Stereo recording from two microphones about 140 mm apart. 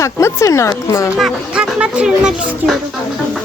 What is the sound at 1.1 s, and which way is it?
Speech, 5° right (ahead or behind).